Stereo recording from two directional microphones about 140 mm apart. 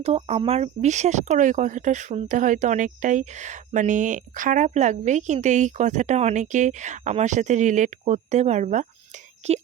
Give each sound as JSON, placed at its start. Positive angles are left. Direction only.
{"t": 0.0, "sound": "speech", "side_deg": -45}